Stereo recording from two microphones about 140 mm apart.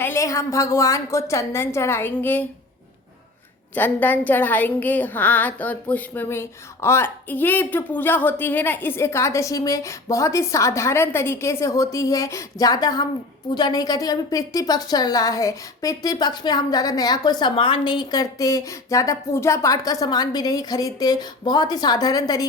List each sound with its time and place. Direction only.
0.0 s a woman's voice: 20° left (ahead or behind)
3.8 s a woman's voice: 15° left (ahead or behind)